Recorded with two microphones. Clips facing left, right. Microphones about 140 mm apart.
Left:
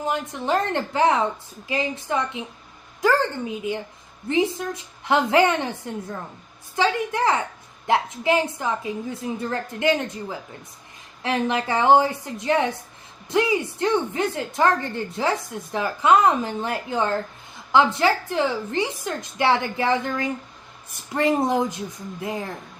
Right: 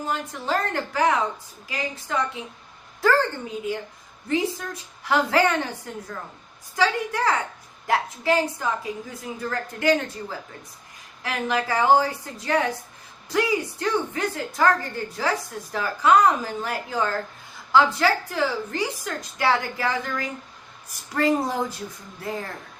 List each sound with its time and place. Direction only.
0.0 s a woman's voice: 20° left (ahead or behind)